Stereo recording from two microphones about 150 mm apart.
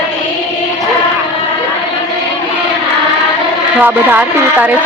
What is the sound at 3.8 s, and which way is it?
Speech, 10° right (ahead or behind).